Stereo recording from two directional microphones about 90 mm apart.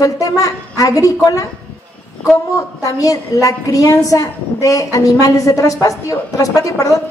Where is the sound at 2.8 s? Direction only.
40° left (ahead or behind).